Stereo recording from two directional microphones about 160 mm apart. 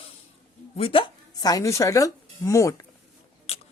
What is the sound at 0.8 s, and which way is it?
A woman's voice, 35° left (ahead or behind).